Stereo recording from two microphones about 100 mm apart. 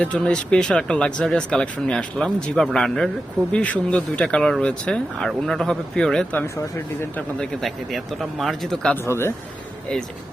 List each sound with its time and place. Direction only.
0.0 s speech: 10° left (ahead or behind)
9.0 s speech: 25° left (ahead or behind)